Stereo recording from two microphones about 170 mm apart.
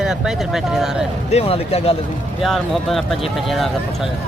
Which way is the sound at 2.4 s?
Centre (ahead or behind).